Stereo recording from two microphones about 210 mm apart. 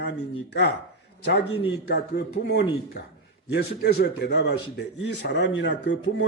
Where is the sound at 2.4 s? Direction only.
50° left (ahead or behind).